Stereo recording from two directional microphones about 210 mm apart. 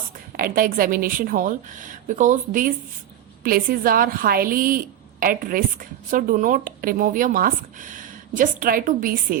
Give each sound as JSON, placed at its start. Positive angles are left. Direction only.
{"t": 0.3, "sound": "a woman's voice", "side_deg": -45}